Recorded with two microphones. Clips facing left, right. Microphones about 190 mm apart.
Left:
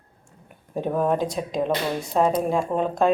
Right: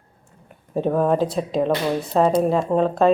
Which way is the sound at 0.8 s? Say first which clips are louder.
Right 4 dB; 5° left (ahead or behind).